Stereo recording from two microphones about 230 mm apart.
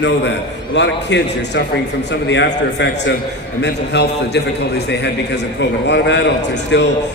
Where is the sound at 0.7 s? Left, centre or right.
Left.